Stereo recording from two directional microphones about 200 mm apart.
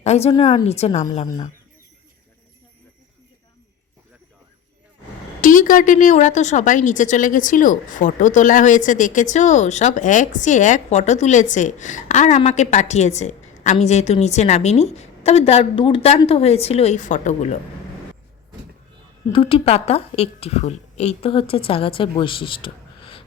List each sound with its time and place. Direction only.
0.0 s a woman's voice: 30° left (ahead or behind)
5.4 s a woman's voice: 40° left (ahead or behind)
19.3 s speech: 25° left (ahead or behind)